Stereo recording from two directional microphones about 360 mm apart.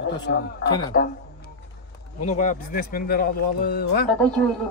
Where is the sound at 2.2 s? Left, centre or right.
Centre.